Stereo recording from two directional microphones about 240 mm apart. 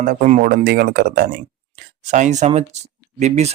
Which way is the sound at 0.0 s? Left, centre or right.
Right.